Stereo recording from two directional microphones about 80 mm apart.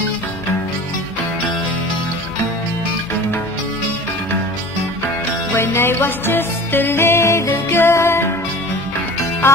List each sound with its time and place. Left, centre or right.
5.5 s music: left